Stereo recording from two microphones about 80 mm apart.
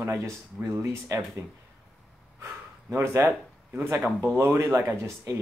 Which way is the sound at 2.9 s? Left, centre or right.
Right.